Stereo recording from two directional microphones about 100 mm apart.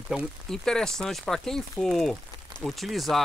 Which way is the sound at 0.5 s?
5° left (ahead or behind).